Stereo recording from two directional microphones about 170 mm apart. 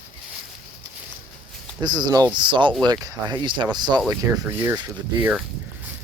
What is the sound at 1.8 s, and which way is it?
Speech, 25° right (ahead or behind).